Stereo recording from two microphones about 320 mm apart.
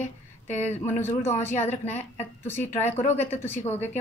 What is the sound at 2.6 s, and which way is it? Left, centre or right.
Speech, left.